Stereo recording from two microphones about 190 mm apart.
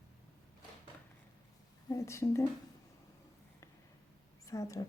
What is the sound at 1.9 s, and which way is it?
Speech, 15° left (ahead or behind).